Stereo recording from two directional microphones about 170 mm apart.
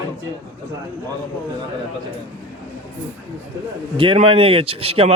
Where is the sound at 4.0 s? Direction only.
30° right (ahead or behind).